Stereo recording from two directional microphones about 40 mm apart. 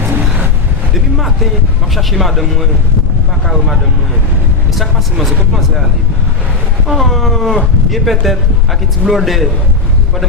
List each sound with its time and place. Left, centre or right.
2.0 s speech: centre
6.8 s speech: centre